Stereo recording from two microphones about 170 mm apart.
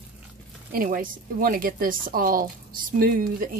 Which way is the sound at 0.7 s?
55° right (ahead or behind).